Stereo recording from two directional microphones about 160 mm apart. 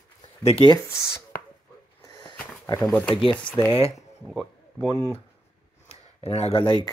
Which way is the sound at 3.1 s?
35° left (ahead or behind).